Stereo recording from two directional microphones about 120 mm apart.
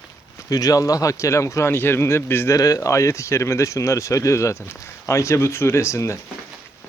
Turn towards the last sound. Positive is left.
turn(degrees=25)  # may be behind; listen again after turning